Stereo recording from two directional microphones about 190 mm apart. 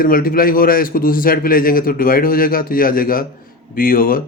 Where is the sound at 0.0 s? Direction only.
50° left (ahead or behind).